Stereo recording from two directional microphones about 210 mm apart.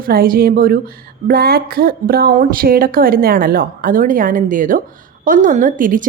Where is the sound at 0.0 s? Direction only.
45° right (ahead or behind).